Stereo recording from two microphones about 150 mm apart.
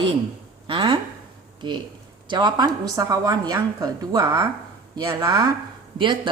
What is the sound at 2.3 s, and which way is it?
A woman's voice, 30° right (ahead or behind).